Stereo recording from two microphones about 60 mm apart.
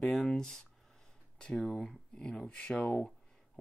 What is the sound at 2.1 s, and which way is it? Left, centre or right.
Speech, centre.